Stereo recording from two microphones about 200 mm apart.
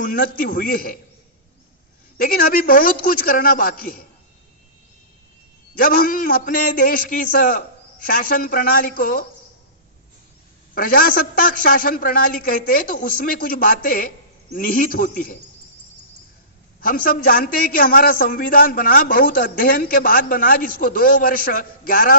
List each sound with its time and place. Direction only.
0.0 s a man's voice: 45° left (ahead or behind)
2.1 s a man's voice: 45° left (ahead or behind)
5.8 s a man's voice: 45° left (ahead or behind)
10.7 s a man's voice: 45° left (ahead or behind)
16.8 s a man's voice: 45° left (ahead or behind)